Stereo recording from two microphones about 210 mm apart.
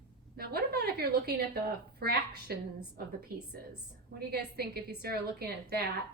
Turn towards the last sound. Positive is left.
turn(degrees=-50)  # may be behind; listen again after turning